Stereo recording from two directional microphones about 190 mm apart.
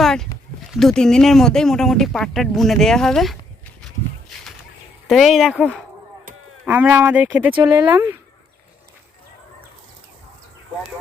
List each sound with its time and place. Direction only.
0.0 s a sound: centre (ahead or behind)
0.7 s speech: centre (ahead or behind)
5.0 s speech: centre (ahead or behind)
7.5 s speech: 25° right (ahead or behind)
7.9 s speech: 15° right (ahead or behind)